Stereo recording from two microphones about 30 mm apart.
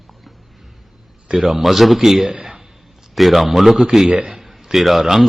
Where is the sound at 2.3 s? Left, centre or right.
Right.